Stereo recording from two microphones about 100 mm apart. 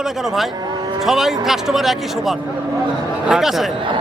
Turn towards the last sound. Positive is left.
turn(degrees=-5)  # may be behind; listen again after turning